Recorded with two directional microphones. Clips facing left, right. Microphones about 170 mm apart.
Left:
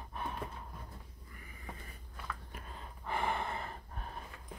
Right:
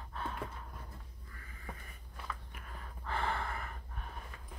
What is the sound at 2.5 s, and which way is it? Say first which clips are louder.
Gasp: left 2 dB; 25° left (ahead or behind).